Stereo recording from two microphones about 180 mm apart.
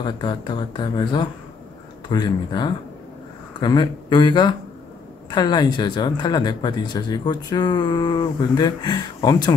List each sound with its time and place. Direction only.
0.0 s speech: 25° left (ahead or behind)